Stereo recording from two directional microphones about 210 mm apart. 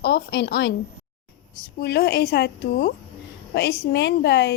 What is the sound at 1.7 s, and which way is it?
A woman's voice, 50° left (ahead or behind).